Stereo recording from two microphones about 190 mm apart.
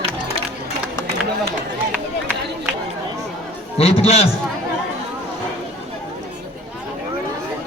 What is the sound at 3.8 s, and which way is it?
Speech, 30° left (ahead or behind).